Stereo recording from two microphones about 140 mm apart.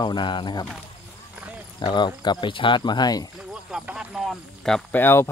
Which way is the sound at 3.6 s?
5° right (ahead or behind).